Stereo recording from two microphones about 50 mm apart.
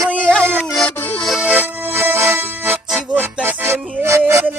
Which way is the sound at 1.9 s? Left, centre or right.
Right.